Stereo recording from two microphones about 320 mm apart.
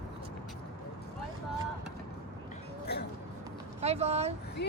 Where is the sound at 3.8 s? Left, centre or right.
Centre.